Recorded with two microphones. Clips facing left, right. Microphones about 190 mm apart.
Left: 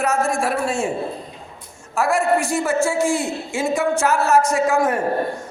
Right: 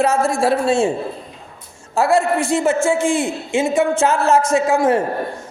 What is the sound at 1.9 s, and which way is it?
Speech, 25° right (ahead or behind).